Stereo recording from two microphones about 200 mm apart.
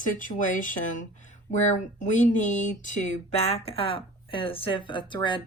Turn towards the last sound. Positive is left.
turn(degrees=25)  # may be behind; listen again after turning